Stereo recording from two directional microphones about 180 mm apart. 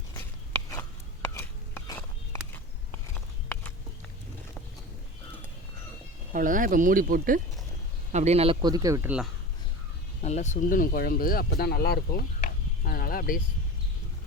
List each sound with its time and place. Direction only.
1.3 s a sound: 15° left (ahead or behind)
6.3 s speech: 50° right (ahead or behind)
8.1 s speech: 35° right (ahead or behind)
8.6 s speech: 20° right (ahead or behind)
10.2 s speech: 40° left (ahead or behind)